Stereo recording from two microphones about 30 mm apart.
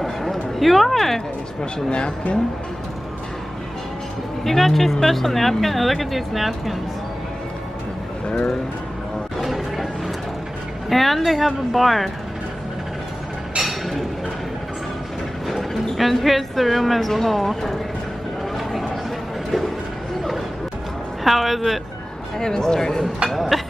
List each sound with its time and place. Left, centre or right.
0.0 s a sound: centre
1.9 s speech: left
4.5 s speech: centre
9.4 s music: centre
10.9 s speech: centre
13.7 s a sound: centre
15.4 s a woman's voice: centre
21.2 s a woman's voice: centre
22.4 s speech: left
23.5 s a sound: centre